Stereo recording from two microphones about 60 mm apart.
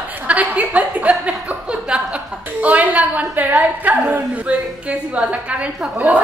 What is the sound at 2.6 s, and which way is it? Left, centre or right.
A woman's voice, right.